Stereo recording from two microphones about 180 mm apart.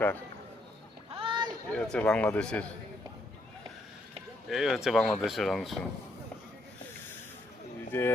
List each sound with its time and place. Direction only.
1.1 s a sound: 30° right (ahead or behind)
1.7 s a man's voice: 5° left (ahead or behind)
4.4 s speech: centre (ahead or behind)
7.9 s a man's voice: 10° left (ahead or behind)